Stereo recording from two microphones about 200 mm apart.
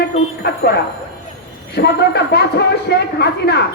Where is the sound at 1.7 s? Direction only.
55° left (ahead or behind).